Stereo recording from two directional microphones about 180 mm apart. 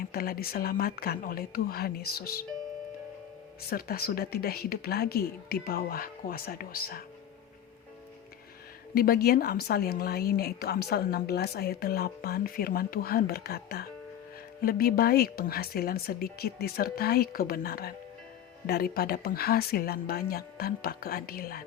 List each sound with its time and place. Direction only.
0.1 s a woman's voice: 55° left (ahead or behind)
3.7 s a woman's voice: 55° left (ahead or behind)
9.0 s a woman's voice: 55° left (ahead or behind)